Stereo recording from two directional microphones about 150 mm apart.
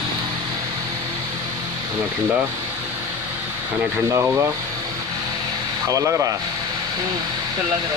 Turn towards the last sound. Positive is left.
turn(degrees=-20)  # may be behind; listen again after turning